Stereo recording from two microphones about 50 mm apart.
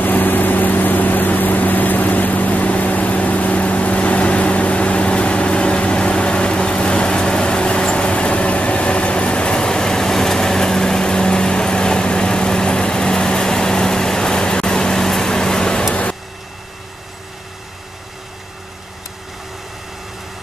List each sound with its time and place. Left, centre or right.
0.0 s vehicle: left; by 15.8 s centre